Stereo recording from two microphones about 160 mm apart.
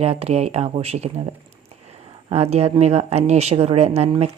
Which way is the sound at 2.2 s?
40° right (ahead or behind).